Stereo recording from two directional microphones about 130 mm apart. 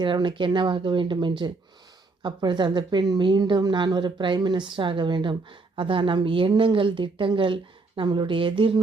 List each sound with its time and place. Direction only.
0.0 s a woman's voice: 35° right (ahead or behind)